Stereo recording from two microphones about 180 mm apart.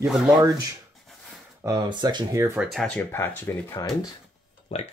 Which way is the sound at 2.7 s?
Centre (ahead or behind).